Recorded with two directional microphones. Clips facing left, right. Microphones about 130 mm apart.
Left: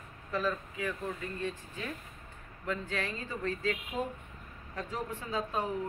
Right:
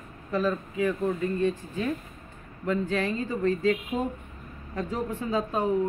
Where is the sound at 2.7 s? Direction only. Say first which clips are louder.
Right 9 dB; 20° right (ahead or behind).